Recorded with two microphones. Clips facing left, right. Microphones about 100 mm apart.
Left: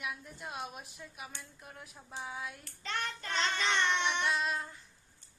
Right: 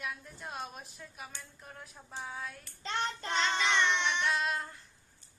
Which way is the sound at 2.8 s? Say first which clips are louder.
Right 3 dB; 25° right (ahead or behind).